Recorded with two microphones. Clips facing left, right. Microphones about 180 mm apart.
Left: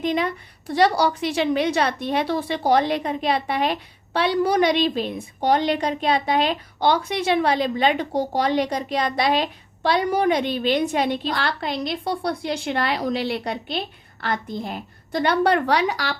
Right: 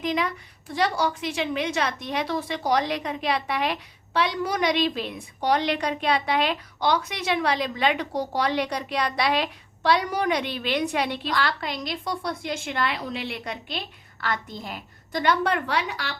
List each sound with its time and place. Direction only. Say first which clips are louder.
0.0 s a woman's voice: left 3 dB; 30° left (ahead or behind)
6.1 s speech: left 3 dB; 45° left (ahead or behind)
6.4 s a woman's voice: left 4 dB; 30° left (ahead or behind)
15.1 s a woman's voice: left 4 dB; 35° left (ahead or behind)